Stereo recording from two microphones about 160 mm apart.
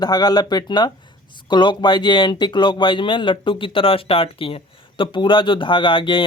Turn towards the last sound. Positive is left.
turn(degrees=30)  # may be behind; listen again after turning